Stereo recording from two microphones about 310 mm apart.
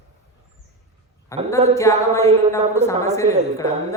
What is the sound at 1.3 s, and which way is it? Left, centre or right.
A woman's voice, centre.